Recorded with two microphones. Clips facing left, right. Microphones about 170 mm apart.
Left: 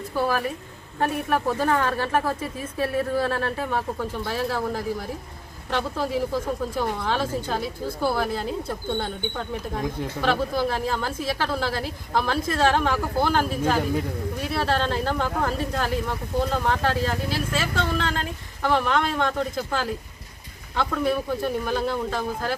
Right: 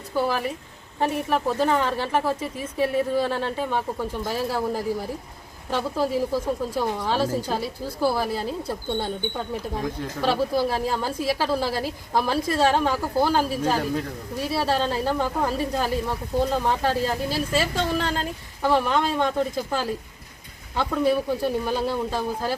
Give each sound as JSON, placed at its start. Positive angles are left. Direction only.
{"t": 0.2, "sound": "speech", "side_deg": -15}